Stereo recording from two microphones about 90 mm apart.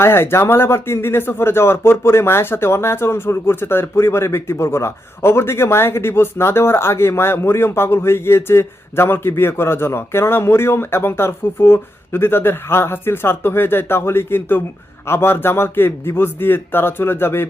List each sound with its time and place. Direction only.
0.0 s speech: 25° left (ahead or behind)